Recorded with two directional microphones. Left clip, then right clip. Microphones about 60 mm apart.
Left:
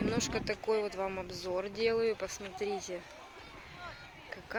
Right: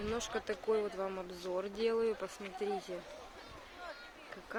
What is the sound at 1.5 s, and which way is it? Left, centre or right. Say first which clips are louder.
Speech: left 3 dB; centre.